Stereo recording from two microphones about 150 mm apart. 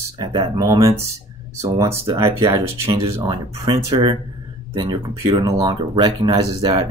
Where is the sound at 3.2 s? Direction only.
25° right (ahead or behind).